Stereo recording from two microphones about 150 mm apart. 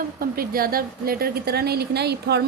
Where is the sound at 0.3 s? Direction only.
75° right (ahead or behind).